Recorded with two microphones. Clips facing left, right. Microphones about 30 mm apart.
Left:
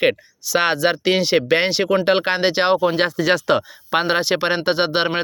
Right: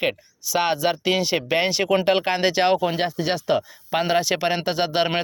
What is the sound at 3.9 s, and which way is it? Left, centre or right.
Speech, left.